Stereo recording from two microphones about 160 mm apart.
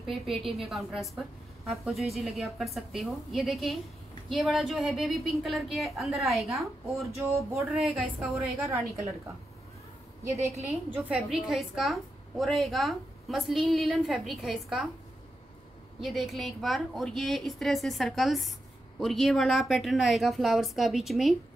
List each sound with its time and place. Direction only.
0.0 s a woman's voice: centre (ahead or behind)
7.2 s a sound: 20° right (ahead or behind)
7.7 s a woman's voice: 5° right (ahead or behind)
10.3 s a woman's voice: 20° right (ahead or behind); by 14.9 s centre (ahead or behind)
16.0 s a woman's voice: centre (ahead or behind)